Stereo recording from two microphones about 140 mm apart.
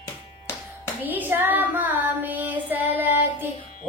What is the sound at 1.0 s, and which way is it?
Child singing, 15° right (ahead or behind).